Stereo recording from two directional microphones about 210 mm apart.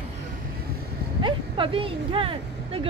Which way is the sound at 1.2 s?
25° right (ahead or behind).